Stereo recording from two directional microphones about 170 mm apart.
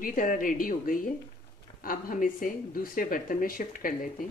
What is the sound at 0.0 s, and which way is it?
Speech, 55° left (ahead or behind).